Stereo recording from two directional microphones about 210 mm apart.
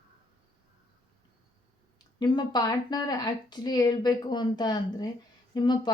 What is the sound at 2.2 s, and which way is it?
Speech, 20° left (ahead or behind).